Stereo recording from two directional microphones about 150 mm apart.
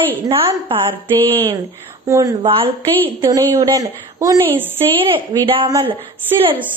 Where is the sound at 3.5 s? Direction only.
25° right (ahead or behind).